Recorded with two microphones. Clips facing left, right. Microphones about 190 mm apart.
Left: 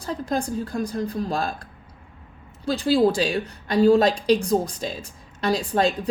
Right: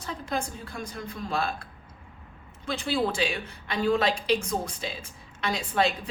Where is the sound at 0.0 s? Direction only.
35° left (ahead or behind).